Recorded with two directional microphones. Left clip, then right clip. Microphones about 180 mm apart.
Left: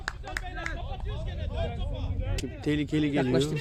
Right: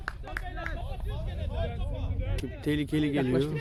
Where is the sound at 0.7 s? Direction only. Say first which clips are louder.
Left 2 dB; 20° left (ahead or behind).